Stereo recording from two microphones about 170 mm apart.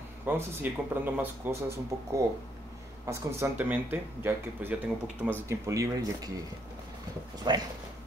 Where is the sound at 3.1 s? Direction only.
15° right (ahead or behind).